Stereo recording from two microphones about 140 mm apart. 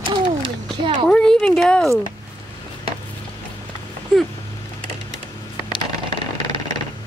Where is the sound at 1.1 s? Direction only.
5° left (ahead or behind).